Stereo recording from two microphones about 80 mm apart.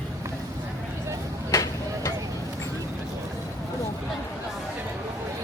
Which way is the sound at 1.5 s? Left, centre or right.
Left.